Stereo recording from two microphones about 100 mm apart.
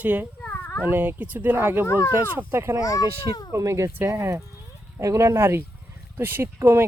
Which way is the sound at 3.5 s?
30° right (ahead or behind).